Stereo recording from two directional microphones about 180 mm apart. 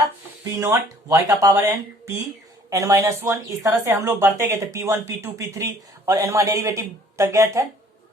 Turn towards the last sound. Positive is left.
turn(degrees=-15)  # may be behind; listen again after turning